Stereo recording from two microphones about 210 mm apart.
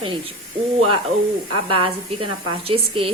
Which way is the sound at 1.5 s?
25° right (ahead or behind).